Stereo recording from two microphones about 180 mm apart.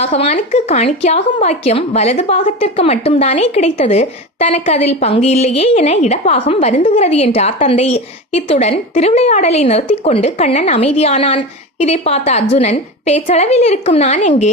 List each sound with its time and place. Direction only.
0.0 s a woman's voice: 35° left (ahead or behind)